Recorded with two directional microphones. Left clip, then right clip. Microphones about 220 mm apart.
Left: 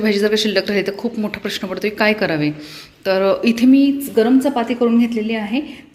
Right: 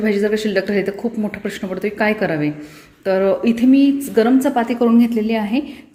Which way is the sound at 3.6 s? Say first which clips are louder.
Even; 35° left (ahead or behind).